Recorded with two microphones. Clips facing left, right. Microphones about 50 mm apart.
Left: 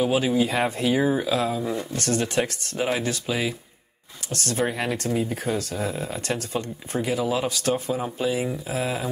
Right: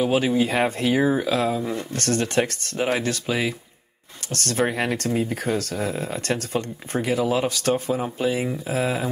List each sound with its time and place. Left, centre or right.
0.0 s speech: right